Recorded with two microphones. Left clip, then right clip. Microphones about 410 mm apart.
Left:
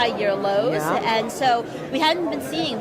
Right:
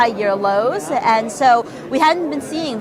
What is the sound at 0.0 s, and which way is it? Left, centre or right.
A woman's voice, right.